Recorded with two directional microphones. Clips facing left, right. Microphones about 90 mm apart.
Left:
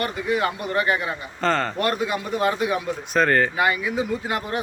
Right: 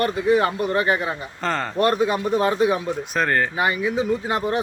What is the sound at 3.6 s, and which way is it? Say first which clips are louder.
Speech: right 1 dB; 25° right (ahead or behind).